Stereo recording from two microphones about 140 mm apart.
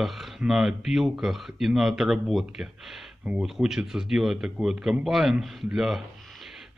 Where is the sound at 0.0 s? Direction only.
Centre (ahead or behind).